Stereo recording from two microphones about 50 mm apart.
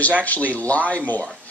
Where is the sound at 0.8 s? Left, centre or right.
Right.